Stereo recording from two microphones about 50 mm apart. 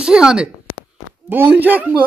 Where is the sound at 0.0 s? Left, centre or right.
Centre.